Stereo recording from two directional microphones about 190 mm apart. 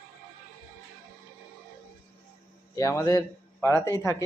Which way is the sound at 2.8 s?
15° left (ahead or behind).